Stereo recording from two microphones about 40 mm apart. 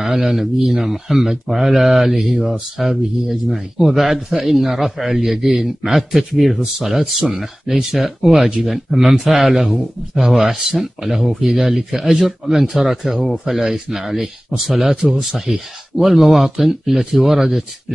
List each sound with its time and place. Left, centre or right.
0.0 s speech: centre
8.0 s speech: centre